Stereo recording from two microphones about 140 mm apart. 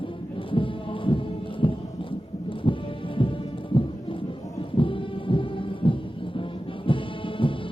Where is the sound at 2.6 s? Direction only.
35° left (ahead or behind).